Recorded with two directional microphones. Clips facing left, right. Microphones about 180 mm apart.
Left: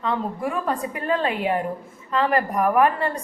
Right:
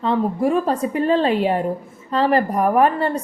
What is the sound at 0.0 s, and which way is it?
A woman's voice, 30° right (ahead or behind).